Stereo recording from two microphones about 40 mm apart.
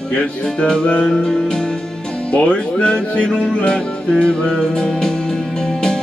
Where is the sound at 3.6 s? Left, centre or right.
Left.